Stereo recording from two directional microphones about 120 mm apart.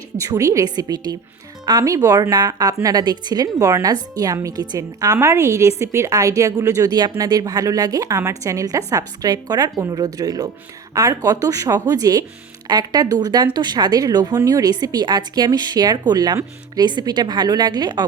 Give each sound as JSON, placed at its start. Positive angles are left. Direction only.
{"t": 0.2, "sound": "a woman's voice", "side_deg": -25}